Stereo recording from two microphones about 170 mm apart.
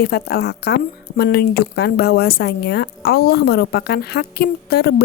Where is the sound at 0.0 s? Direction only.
65° left (ahead or behind).